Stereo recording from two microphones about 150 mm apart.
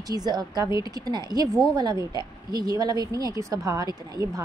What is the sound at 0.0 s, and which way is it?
A woman's voice, 25° right (ahead or behind).